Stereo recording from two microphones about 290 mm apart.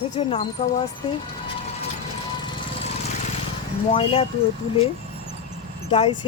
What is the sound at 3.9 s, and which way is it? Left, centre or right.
Speech, centre.